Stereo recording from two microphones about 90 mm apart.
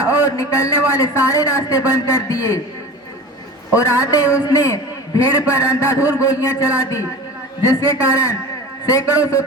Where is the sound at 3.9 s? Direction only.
40° left (ahead or behind).